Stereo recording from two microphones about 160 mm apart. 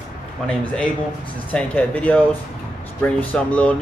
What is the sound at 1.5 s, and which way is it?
Speech, 10° left (ahead or behind).